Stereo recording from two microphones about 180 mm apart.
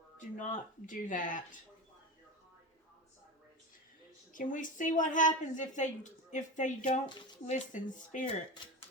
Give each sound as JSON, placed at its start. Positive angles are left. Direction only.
{"t": 0.2, "sound": "a woman's voice", "side_deg": 45}
{"t": 4.3, "sound": "a woman's voice", "side_deg": 45}